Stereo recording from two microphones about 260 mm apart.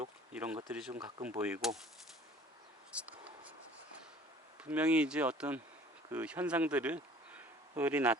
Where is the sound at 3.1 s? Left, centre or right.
Centre.